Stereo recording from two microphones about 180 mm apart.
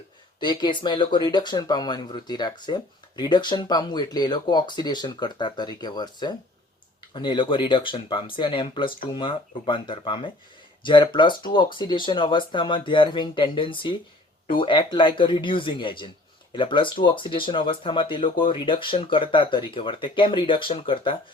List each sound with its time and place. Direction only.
0.3 s speech: 25° left (ahead or behind)